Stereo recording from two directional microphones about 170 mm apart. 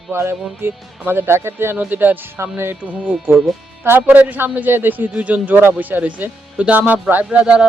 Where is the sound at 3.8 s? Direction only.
10° right (ahead or behind).